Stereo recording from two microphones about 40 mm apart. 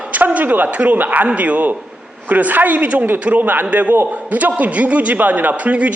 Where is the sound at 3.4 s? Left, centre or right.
Right.